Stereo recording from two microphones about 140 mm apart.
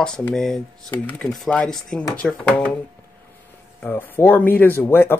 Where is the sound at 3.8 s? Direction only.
15° left (ahead or behind).